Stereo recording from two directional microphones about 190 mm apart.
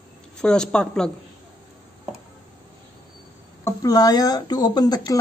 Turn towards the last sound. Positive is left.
turn(degrees=20)  # may be behind; listen again after turning